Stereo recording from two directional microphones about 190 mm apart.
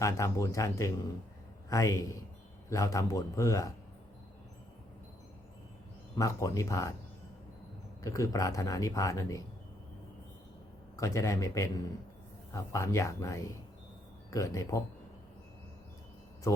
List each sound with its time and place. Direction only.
0.0 s speech: 15° left (ahead or behind)
6.1 s speech: 15° left (ahead or behind)
8.0 s speech: 20° left (ahead or behind)
10.9 s speech: 15° left (ahead or behind)